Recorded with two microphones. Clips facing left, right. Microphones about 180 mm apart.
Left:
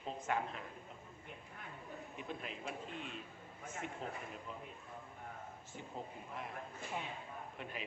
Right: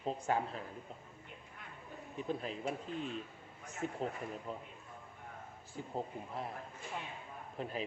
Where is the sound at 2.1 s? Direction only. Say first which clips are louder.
Right 9 dB; 35° right (ahead or behind).